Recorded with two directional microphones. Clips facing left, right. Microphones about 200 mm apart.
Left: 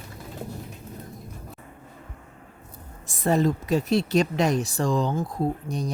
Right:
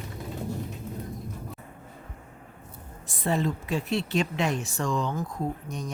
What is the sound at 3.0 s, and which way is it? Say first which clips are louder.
A woman's voice: left 5 dB; 45° left (ahead or behind).